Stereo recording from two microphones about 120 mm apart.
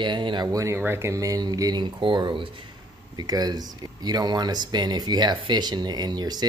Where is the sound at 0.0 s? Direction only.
40° right (ahead or behind).